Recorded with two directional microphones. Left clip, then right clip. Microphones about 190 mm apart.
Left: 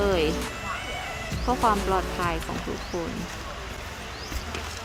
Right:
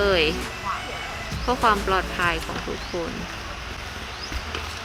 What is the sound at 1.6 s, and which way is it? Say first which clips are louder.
Speech: right 3 dB; 35° left (ahead or behind).